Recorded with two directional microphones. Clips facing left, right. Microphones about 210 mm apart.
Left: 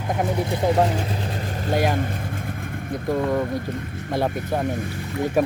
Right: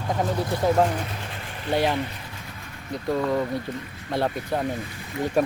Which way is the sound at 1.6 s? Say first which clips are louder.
Left 1 dB; 45° left (ahead or behind).